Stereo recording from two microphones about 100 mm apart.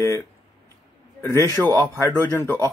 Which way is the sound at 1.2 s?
25° left (ahead or behind).